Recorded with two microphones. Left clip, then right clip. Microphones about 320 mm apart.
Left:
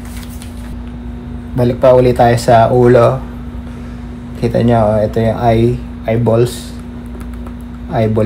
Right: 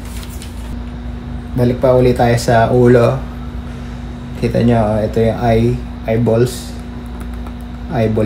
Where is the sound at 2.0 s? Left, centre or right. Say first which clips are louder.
Left 3 dB; centre.